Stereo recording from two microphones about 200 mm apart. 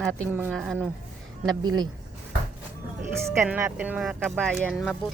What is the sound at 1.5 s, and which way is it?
Speech, 20° right (ahead or behind).